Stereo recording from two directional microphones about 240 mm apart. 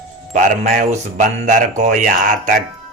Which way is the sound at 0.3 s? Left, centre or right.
Right.